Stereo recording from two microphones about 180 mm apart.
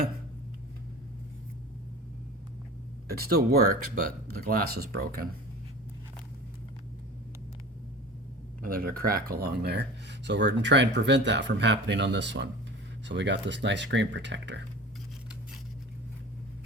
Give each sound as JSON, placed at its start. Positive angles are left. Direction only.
{"t": 3.1, "sound": "speech", "side_deg": -60}
{"t": 8.6, "sound": "speech", "side_deg": -55}